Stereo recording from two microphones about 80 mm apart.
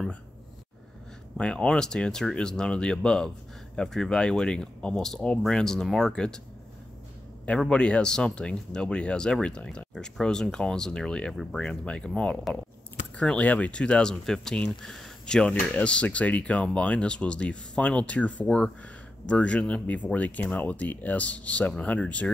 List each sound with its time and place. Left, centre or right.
1.4 s speech: centre
7.7 s speech: centre